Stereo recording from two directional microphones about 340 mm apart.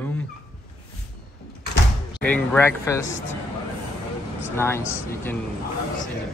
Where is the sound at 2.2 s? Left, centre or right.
Centre.